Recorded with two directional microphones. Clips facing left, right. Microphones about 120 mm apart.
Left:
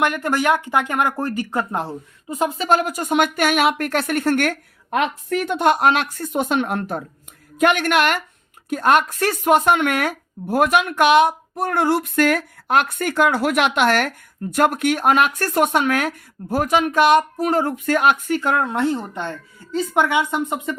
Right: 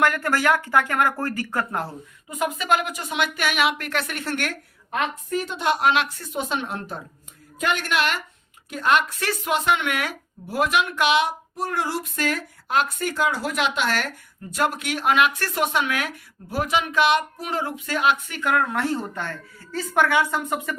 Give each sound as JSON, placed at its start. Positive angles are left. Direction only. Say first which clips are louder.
{"t": 0.0, "sound": "speech", "louder": "left 2 dB", "side_deg": 20}
{"t": 2.3, "sound": "a woman's voice", "louder": "left 4 dB", "side_deg": 30}
{"t": 18.3, "sound": "speech", "louder": "left 3 dB", "side_deg": 30}